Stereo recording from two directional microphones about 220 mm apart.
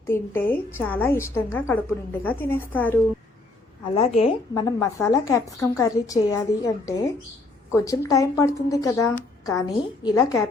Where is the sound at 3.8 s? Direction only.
25° left (ahead or behind).